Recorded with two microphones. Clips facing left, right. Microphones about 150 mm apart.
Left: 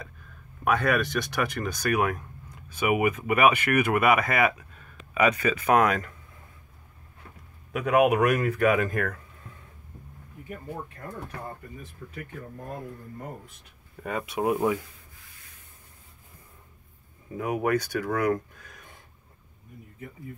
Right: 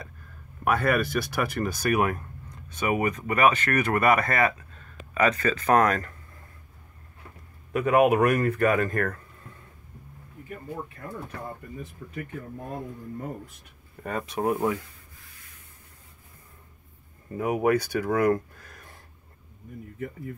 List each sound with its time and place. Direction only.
0.7 s speech: 5° right (ahead or behind)
7.7 s speech: centre (ahead or behind)
14.0 s speech: 5° left (ahead or behind)
17.3 s speech: 5° right (ahead or behind)